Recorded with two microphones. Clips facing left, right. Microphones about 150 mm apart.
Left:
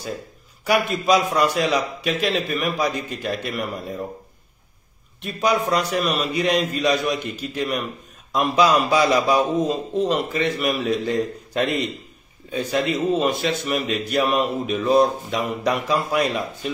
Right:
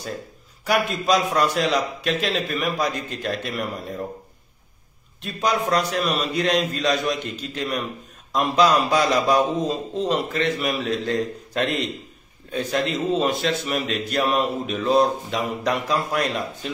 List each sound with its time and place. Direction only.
0.7 s a man's voice: centre (ahead or behind)
5.2 s a man's voice: 5° left (ahead or behind)